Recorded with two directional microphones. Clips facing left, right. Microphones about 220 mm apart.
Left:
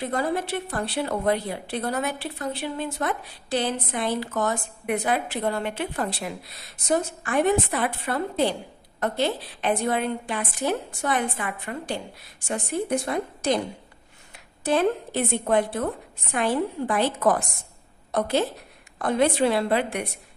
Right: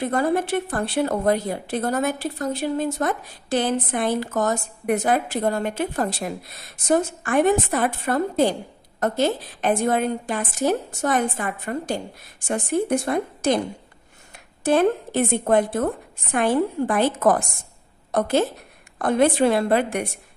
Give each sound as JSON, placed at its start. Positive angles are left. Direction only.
{"t": 0.0, "sound": "a woman's voice", "side_deg": -50}
{"t": 13.0, "sound": "a woman's voice", "side_deg": -50}